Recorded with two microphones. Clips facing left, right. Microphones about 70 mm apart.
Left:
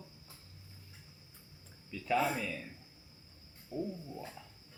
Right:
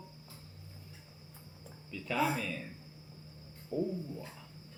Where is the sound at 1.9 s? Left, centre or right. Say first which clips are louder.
Left 2 dB; centre.